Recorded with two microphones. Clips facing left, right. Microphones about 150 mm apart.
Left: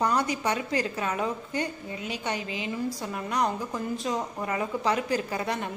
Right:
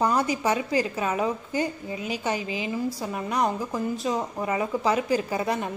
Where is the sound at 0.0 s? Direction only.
5° right (ahead or behind).